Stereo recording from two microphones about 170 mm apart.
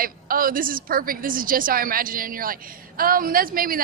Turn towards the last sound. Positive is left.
turn(degrees=-55)  # may be behind; listen again after turning